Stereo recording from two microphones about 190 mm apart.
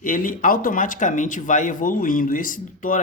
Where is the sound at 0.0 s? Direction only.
45° left (ahead or behind).